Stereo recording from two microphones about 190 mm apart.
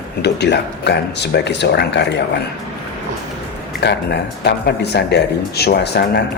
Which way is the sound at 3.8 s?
65° left (ahead or behind).